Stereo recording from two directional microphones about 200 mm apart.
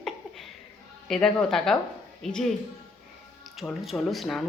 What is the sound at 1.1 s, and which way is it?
Speech, 5° left (ahead or behind).